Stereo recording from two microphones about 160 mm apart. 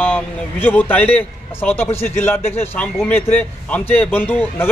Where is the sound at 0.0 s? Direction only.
10° left (ahead or behind).